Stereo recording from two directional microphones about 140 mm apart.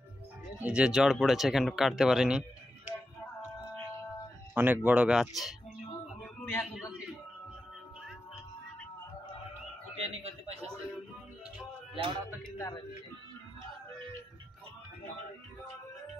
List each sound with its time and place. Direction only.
0.6 s speech: 10° right (ahead or behind)
4.6 s speech: 10° right (ahead or behind)
6.4 s a man's voice: 15° left (ahead or behind)
6.7 s speech: 5° right (ahead or behind)
9.9 s speech: 45° right (ahead or behind)
11.9 s music: 40° right (ahead or behind)
12.5 s speech: 25° left (ahead or behind)